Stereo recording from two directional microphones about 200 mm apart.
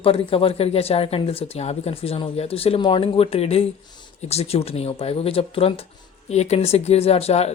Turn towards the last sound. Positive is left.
turn(degrees=30)  # may be behind; listen again after turning